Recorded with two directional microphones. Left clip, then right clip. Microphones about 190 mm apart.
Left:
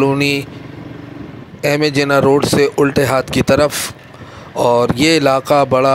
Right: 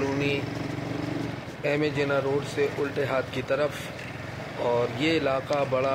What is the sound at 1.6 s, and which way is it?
Speech, 60° left (ahead or behind).